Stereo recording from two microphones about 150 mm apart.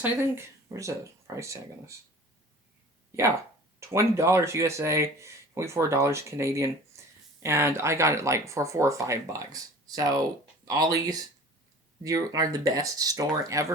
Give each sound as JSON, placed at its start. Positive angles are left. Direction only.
{"t": 0.0, "sound": "speech", "side_deg": -15}
{"t": 3.8, "sound": "speech", "side_deg": -20}
{"t": 6.9, "sound": "a sound", "side_deg": -20}
{"t": 7.3, "sound": "speech", "side_deg": -15}